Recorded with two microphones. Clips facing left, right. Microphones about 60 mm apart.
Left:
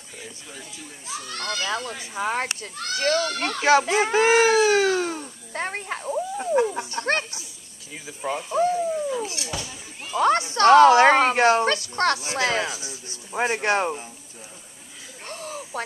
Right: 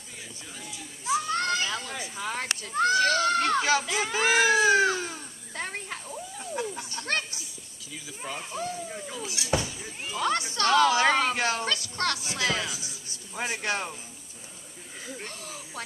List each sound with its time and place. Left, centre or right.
1.0 s children playing: right
1.7 s speech: left
2.7 s speech: right
3.6 s a child's voice: left
4.9 s cat: left
6.8 s a child's voice: left
15.2 s a sound: left